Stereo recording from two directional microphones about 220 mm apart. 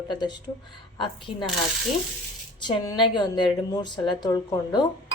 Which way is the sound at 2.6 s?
20° left (ahead or behind).